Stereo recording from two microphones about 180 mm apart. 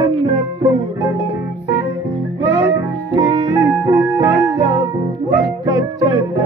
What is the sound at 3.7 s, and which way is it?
Music, 20° right (ahead or behind).